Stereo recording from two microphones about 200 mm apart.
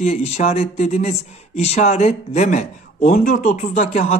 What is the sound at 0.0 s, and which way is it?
A man's voice, 35° left (ahead or behind).